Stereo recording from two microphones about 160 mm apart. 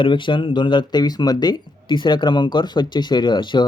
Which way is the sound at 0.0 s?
30° left (ahead or behind).